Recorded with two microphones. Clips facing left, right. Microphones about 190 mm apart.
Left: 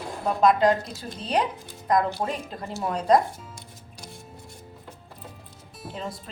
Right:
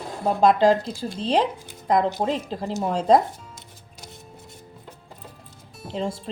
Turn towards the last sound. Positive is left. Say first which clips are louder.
# right 6 dB
turn(degrees=-30)  # may be behind; listen again after turning